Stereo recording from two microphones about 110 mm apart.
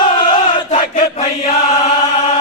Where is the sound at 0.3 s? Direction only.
90° left.